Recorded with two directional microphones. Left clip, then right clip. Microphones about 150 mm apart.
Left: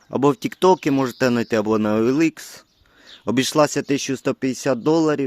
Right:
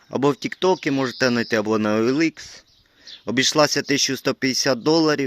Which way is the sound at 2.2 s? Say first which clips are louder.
Left 2 dB; 50° left (ahead or behind).